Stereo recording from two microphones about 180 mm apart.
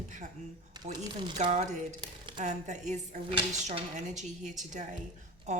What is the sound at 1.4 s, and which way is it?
A woman's voice, 40° right (ahead or behind).